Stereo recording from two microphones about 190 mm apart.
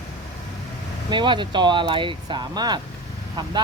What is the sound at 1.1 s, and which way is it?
Speech, 25° right (ahead or behind).